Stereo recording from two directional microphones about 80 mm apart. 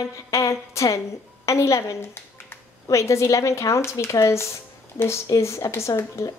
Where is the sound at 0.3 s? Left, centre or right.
Left.